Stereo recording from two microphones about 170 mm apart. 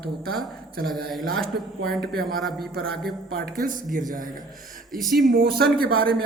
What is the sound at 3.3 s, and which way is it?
Speech, 55° right (ahead or behind).